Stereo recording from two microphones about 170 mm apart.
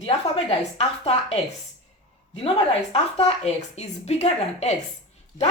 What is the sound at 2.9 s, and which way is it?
Speech, 35° left (ahead or behind).